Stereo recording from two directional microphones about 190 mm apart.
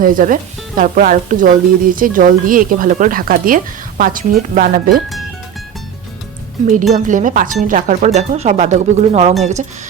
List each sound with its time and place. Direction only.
0.0 s a woman's voice: 45° right (ahead or behind)
6.9 s speech: 40° right (ahead or behind)